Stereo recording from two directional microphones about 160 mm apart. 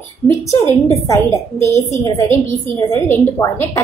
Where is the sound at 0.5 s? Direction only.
20° left (ahead or behind).